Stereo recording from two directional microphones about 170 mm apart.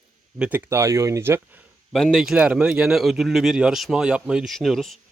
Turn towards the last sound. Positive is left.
turn(degrees=0)  # may be behind; listen again after turning